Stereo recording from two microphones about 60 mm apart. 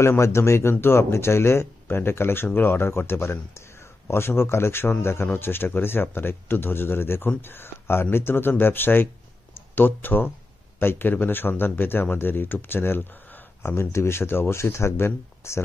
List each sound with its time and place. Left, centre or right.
0.0 s speech: left